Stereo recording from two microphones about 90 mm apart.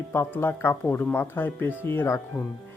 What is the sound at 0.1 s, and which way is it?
Speech, 25° left (ahead or behind).